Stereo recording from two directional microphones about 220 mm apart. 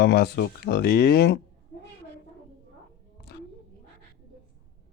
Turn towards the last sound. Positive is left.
turn(degrees=45)  # may be behind; listen again after turning